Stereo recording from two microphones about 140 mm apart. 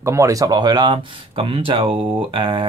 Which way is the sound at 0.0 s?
20° right (ahead or behind).